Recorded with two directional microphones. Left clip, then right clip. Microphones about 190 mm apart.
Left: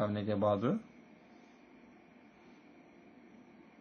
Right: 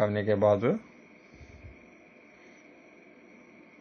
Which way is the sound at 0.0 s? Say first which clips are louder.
Right 8 dB; 15° right (ahead or behind).